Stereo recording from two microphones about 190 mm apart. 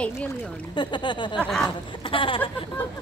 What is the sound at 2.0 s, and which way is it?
Speech, 25° left (ahead or behind).